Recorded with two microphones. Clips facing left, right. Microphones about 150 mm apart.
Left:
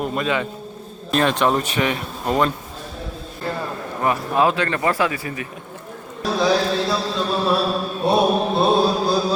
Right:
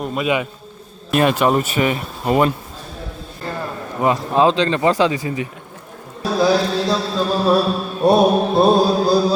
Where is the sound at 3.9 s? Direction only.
20° right (ahead or behind).